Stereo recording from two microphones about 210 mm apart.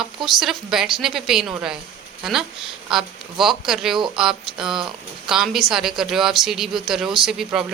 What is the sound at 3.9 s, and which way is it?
Speech, 20° right (ahead or behind).